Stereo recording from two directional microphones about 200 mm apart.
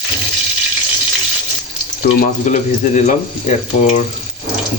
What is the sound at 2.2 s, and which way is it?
Speech, 35° left (ahead or behind).